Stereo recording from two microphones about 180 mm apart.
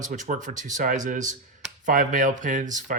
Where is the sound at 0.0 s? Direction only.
45° right (ahead or behind).